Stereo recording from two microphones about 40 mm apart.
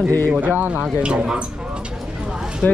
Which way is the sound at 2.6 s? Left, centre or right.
Left.